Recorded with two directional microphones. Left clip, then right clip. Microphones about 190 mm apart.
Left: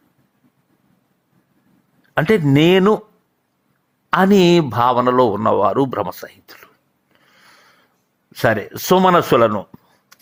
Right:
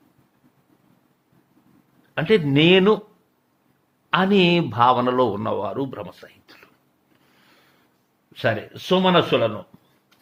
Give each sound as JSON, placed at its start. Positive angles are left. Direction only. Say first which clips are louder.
{"t": 2.1, "sound": "speech", "louder": "left 4 dB", "side_deg": 30}
{"t": 4.1, "sound": "speech", "louder": "left 5 dB", "side_deg": 30}
{"t": 8.3, "sound": "speech", "louder": "left 6 dB", "side_deg": 35}